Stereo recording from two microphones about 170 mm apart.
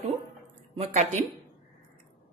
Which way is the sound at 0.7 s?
45° right (ahead or behind).